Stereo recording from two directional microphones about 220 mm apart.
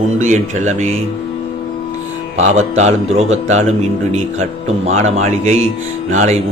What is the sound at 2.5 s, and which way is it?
Speech, 30° right (ahead or behind).